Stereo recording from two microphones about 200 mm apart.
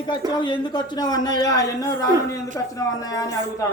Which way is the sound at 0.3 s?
25° left (ahead or behind).